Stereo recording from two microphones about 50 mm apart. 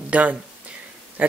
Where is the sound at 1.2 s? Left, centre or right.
Right.